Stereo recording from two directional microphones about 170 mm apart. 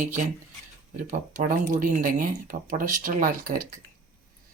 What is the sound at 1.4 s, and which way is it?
Speech, 55° right (ahead or behind).